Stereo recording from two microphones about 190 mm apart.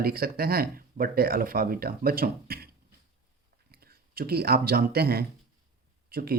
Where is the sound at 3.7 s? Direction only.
55° right (ahead or behind).